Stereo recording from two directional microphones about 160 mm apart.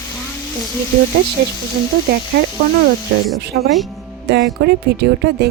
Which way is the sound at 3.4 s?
90° right.